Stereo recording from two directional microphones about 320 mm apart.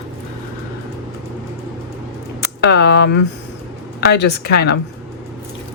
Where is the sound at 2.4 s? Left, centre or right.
Left.